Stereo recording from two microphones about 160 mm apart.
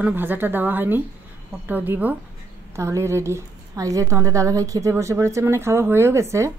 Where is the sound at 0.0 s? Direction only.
10° right (ahead or behind).